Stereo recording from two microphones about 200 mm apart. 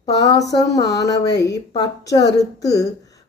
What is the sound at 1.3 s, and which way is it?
Speech, 60° left (ahead or behind).